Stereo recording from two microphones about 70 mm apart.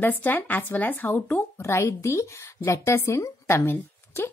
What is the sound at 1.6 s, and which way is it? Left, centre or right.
A woman's voice, left.